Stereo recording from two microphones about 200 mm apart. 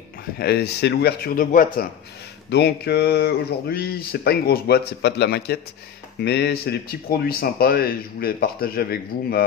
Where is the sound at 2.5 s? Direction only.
55° left (ahead or behind).